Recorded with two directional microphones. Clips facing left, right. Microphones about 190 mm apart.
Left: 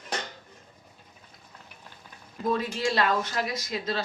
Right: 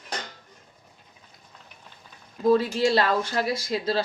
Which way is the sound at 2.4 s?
30° right (ahead or behind).